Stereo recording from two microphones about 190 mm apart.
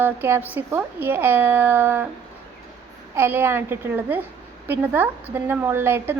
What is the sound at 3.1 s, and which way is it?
A woman's voice, 10° right (ahead or behind).